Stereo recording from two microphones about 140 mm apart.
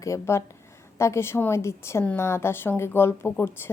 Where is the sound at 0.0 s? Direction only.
20° left (ahead or behind).